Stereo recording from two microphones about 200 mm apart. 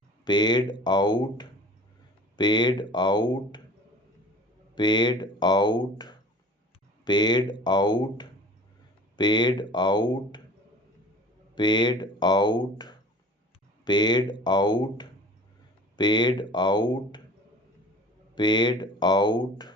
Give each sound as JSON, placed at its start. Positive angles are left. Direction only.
{"t": 0.3, "sound": "speech", "side_deg": 20}
{"t": 4.7, "sound": "speech", "side_deg": 20}
{"t": 11.5, "sound": "speech", "side_deg": 20}
{"t": 18.3, "sound": "speech", "side_deg": 20}